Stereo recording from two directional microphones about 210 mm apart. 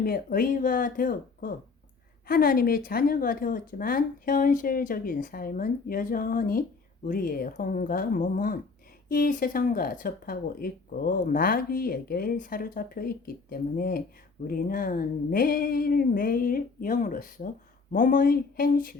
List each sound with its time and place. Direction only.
0.0 s speech: 45° left (ahead or behind)